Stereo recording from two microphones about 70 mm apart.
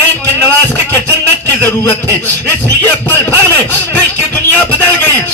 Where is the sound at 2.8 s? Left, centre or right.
Left.